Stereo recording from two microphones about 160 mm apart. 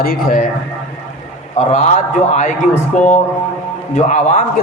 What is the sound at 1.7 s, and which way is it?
Speech, 50° left (ahead or behind).